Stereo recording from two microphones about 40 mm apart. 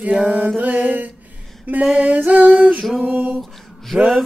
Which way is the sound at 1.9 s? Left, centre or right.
Right.